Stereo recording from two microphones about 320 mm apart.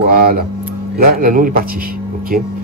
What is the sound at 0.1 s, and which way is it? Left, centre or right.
Speech, right.